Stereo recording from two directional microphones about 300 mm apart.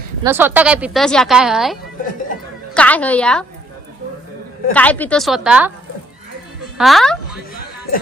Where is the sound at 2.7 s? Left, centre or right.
Centre.